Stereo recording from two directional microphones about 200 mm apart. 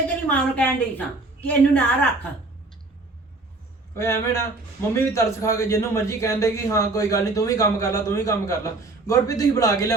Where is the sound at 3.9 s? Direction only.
15° left (ahead or behind).